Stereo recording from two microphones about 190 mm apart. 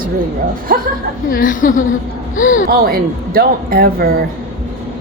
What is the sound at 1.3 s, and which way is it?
A woman's voice, 45° left (ahead or behind).